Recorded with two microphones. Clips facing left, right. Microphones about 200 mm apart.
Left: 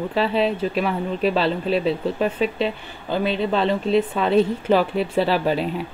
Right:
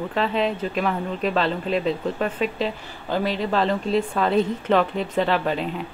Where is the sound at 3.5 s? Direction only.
Centre (ahead or behind).